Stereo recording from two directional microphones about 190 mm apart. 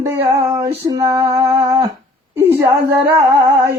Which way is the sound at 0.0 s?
10° right (ahead or behind).